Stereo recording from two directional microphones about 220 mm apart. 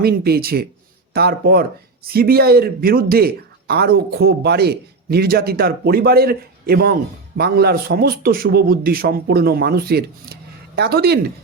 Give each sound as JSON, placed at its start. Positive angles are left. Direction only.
{"t": 0.0, "sound": "speech", "side_deg": -45}